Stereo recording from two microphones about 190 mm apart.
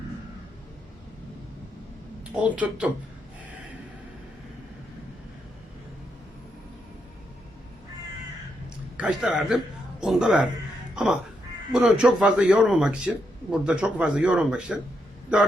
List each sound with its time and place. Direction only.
2.3 s speech: 5° right (ahead or behind)
9.0 s a man's voice: 5° right (ahead or behind)